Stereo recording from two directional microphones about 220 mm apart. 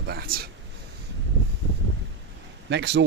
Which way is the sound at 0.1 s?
45° right (ahead or behind).